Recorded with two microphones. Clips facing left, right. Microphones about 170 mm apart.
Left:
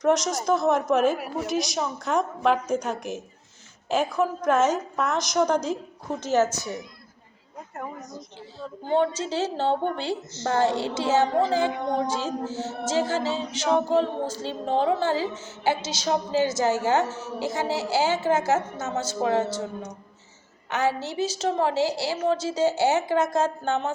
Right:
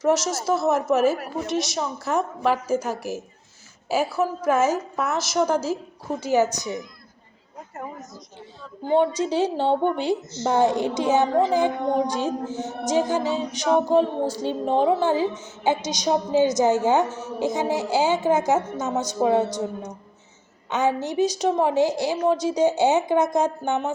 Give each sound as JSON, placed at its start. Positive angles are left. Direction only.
{"t": 0.0, "sound": "a woman's voice", "side_deg": -5}
{"t": 8.9, "sound": "a woman's voice", "side_deg": -10}
{"t": 20.7, "sound": "a woman's voice", "side_deg": -15}